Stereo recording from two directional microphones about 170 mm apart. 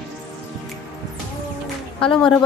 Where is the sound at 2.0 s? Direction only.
30° left (ahead or behind).